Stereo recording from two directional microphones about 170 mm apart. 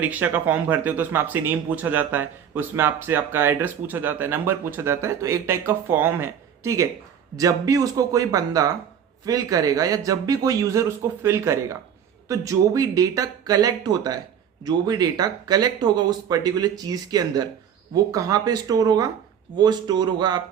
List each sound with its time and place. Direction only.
0.0 s speech: 10° right (ahead or behind)